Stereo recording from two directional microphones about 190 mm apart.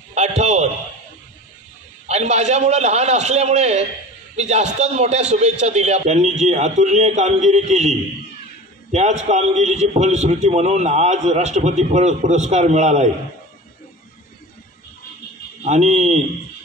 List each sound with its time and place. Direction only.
0.1 s a sound: 35° right (ahead or behind)
2.0 s a man's voice: 35° right (ahead or behind)
15.6 s a man's voice: 35° right (ahead or behind)